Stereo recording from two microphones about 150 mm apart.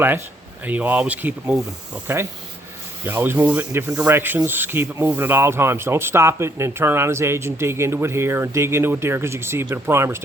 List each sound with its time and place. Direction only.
0.6 s speech: 10° right (ahead or behind)